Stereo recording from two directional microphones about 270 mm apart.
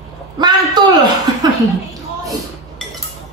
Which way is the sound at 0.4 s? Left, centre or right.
Centre.